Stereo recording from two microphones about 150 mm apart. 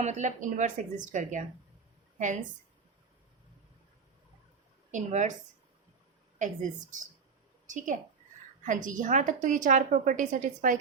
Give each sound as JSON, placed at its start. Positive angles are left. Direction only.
{"t": 0.0, "sound": "a woman's voice", "side_deg": -55}
{"t": 4.9, "sound": "a woman's voice", "side_deg": -55}
{"t": 6.4, "sound": "a woman's voice", "side_deg": -55}
{"t": 8.6, "sound": "a woman's voice", "side_deg": -60}